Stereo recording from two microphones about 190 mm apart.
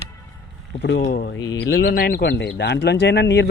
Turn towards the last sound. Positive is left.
turn(degrees=65)  # may be behind; listen again after turning